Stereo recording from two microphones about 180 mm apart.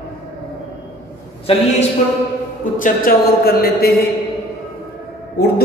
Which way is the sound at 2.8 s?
55° left (ahead or behind).